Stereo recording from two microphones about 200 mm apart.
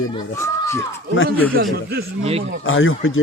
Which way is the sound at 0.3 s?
15° left (ahead or behind).